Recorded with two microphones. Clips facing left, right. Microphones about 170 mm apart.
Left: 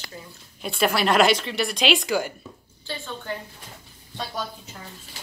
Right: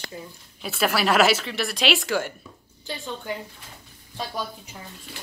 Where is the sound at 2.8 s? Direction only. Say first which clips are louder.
Right 1 dB; 15° right (ahead or behind).